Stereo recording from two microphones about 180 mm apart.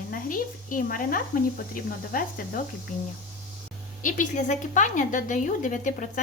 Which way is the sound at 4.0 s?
45° left (ahead or behind).